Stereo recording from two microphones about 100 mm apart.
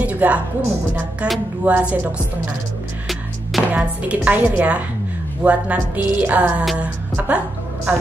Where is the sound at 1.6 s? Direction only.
15° right (ahead or behind).